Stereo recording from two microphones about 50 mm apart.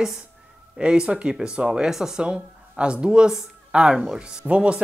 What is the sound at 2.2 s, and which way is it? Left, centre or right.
Speech, centre.